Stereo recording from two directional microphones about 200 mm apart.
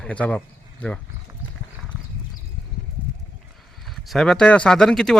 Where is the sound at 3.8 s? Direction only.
Centre (ahead or behind).